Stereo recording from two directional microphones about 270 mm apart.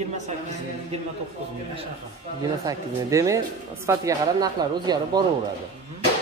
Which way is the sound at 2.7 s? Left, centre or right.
Centre.